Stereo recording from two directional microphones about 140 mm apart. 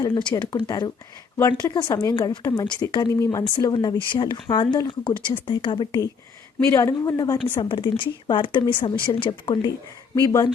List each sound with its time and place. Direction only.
0.0 s speech: 30° left (ahead or behind)